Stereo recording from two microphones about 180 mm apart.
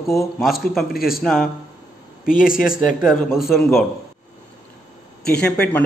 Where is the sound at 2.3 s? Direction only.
50° left (ahead or behind).